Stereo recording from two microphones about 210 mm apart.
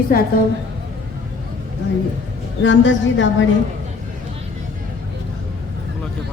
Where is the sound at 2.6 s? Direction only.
60° left (ahead or behind).